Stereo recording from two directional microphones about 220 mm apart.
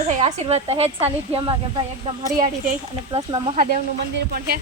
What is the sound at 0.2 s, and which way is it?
Speech, 30° right (ahead or behind).